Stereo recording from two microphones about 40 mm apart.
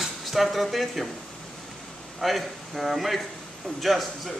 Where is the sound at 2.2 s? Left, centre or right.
Centre.